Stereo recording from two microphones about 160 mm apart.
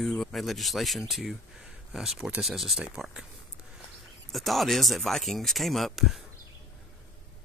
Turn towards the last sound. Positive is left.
turn(degrees=0)  # may be behind; listen again after turning